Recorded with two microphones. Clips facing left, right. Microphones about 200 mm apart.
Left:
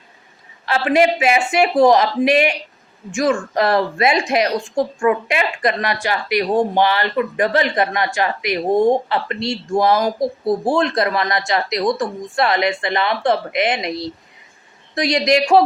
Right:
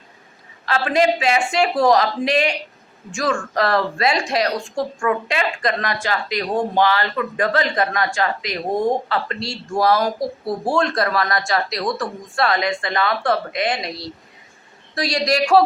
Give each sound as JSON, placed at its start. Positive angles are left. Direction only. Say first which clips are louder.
{"t": 0.6, "sound": "speech", "louder": "left 3 dB", "side_deg": 15}
{"t": 14.9, "sound": "speech", "louder": "left 4 dB", "side_deg": 20}